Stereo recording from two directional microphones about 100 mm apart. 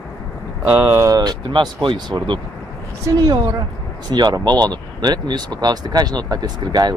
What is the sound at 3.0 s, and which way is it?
Speech, 35° right (ahead or behind).